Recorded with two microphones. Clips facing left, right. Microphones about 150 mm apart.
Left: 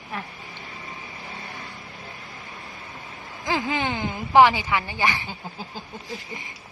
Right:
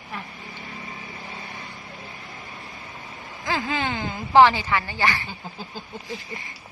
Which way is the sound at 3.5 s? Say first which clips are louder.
Left 1 dB; 15° left (ahead or behind).